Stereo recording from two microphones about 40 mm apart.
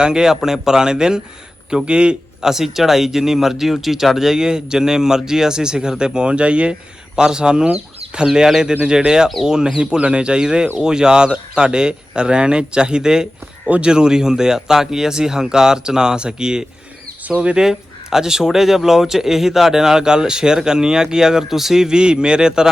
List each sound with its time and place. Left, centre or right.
0.0 s a man's voice: centre
2.5 s speech: centre; by 6.7 s right
7.2 s speech: centre
8.3 s speech: centre
8.9 s speech: centre
17.3 s speech: right
17.6 s speech: centre
21.8 s speech: centre